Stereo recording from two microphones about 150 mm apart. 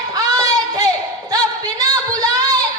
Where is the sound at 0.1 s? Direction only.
25° right (ahead or behind).